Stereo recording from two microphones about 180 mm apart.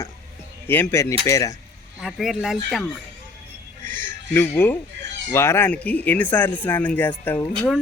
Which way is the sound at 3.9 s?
10° left (ahead or behind).